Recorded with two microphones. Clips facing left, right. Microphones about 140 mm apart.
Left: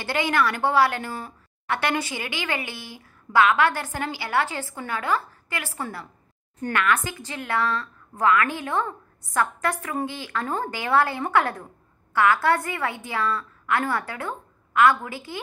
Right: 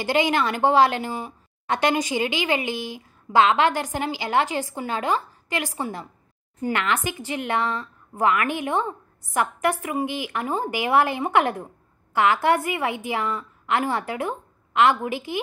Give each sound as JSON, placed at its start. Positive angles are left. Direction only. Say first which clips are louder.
{"t": 0.0, "sound": "a woman's voice", "louder": "right 2 dB", "side_deg": -15}